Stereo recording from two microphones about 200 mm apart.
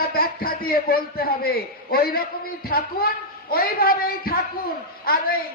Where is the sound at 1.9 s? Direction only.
50° left (ahead or behind).